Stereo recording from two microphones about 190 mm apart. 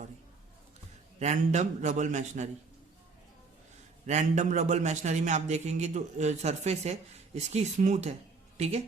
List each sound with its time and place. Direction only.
1.2 s a man's voice: 40° right (ahead or behind)
4.0 s a man's voice: 40° right (ahead or behind)